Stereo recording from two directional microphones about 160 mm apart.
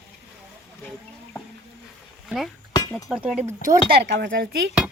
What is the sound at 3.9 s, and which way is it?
Speech, 90° right.